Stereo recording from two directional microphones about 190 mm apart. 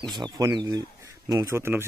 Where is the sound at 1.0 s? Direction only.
15° right (ahead or behind).